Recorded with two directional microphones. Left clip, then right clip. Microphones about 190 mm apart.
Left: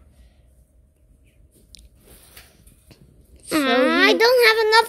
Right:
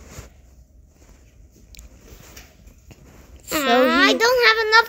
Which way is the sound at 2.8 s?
5° left (ahead or behind).